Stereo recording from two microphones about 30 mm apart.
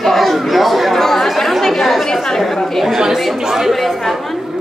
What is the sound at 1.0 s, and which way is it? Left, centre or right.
Speech, centre.